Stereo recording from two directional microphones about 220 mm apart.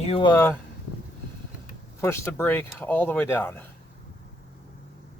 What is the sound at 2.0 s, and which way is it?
Speech, 10° left (ahead or behind).